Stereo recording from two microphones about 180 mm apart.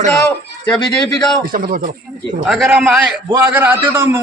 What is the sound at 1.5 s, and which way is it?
Speech, 50° right (ahead or behind).